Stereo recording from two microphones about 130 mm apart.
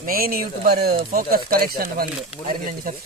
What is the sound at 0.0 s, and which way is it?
Speech, 90° right.